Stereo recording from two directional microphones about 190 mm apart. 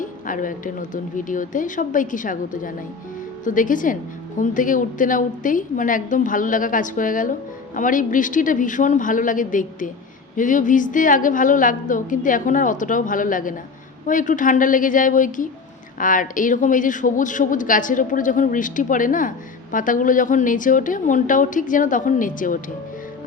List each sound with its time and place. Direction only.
0.0 s speech: 45° left (ahead or behind)